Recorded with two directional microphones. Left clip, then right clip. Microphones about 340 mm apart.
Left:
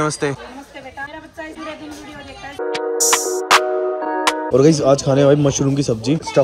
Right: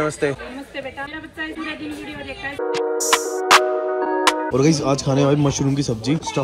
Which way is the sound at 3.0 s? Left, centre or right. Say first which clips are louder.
Left 2 dB; centre.